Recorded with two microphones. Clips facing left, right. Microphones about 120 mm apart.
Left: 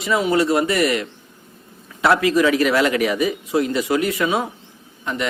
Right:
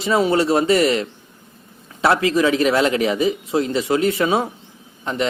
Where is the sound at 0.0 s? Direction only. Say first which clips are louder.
Right 1 dB; 30° right (ahead or behind).